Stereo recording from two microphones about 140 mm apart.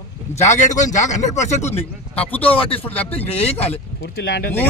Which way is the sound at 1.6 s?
10° left (ahead or behind).